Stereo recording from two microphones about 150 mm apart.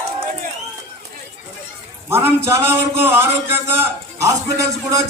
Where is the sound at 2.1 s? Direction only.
15° right (ahead or behind).